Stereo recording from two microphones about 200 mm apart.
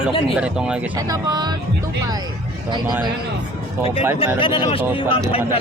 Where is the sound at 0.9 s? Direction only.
20° right (ahead or behind).